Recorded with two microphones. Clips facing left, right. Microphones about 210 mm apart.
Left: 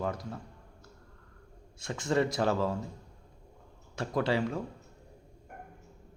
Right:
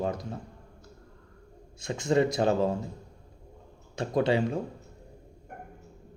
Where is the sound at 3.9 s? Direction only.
20° right (ahead or behind).